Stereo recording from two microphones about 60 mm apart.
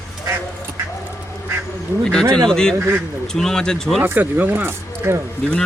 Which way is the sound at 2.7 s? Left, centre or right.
Right.